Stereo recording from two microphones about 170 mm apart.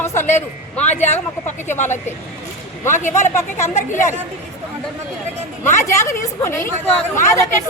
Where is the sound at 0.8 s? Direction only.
45° left (ahead or behind).